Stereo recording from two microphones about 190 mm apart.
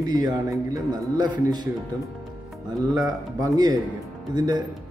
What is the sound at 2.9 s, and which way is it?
Speech, 15° right (ahead or behind).